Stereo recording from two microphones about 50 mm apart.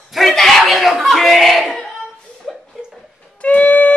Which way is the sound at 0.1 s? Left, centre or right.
Centre.